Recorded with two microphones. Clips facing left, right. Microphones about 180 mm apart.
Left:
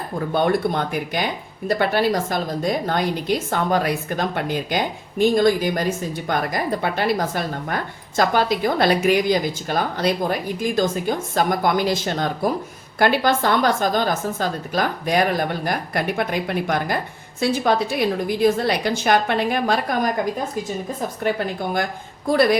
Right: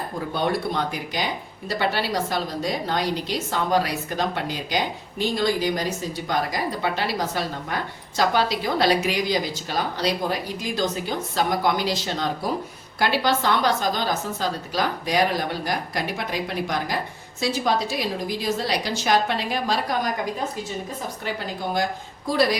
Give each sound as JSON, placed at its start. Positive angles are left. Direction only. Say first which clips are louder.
{"t": 0.3, "sound": "a woman's voice", "louder": "left 5 dB", "side_deg": 55}
{"t": 21.2, "sound": "a woman's voice", "louder": "left 6 dB", "side_deg": 55}